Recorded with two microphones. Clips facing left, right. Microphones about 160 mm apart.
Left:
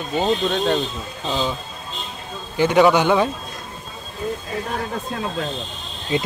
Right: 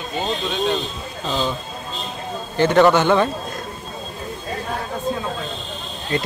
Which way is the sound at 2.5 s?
10° left (ahead or behind).